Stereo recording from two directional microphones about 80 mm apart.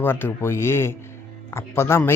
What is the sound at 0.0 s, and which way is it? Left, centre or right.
A man's voice, left.